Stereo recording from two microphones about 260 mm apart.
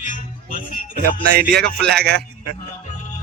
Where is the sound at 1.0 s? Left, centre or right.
Right.